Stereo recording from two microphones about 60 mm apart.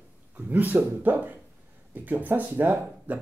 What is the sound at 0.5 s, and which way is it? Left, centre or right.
Speech, right.